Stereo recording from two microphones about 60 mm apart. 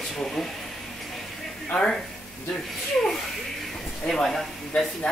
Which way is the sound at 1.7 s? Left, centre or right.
Centre.